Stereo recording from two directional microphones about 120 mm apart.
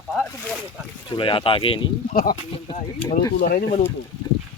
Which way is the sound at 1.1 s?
45° left (ahead or behind).